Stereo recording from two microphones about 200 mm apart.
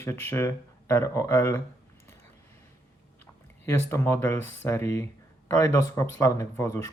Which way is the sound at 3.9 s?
15° left (ahead or behind).